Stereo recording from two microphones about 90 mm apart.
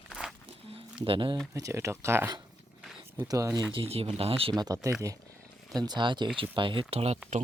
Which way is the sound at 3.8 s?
90° right.